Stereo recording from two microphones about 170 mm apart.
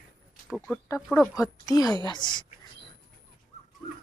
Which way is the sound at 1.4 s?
20° left (ahead or behind).